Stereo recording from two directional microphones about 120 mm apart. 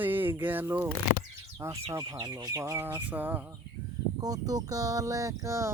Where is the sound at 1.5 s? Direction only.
25° right (ahead or behind).